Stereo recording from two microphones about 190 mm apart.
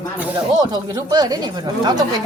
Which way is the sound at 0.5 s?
20° right (ahead or behind).